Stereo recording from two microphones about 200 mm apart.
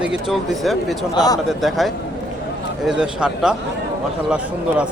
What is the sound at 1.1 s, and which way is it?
Speech, 20° left (ahead or behind).